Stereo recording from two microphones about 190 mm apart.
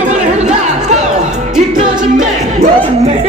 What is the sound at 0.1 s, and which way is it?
Chatter, 40° right (ahead or behind).